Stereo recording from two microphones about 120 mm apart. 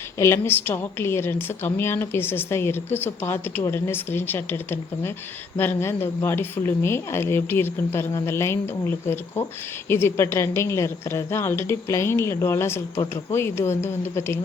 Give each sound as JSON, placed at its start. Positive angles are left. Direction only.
{"t": 0.2, "sound": "a woman's voice", "side_deg": 20}